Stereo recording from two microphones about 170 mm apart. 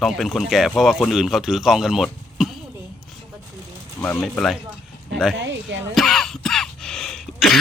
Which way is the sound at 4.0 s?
10° left (ahead or behind).